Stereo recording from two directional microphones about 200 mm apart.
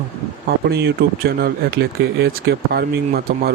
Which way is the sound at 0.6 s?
55° right (ahead or behind).